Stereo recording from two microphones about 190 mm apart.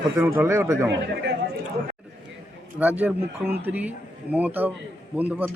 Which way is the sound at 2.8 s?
10° right (ahead or behind).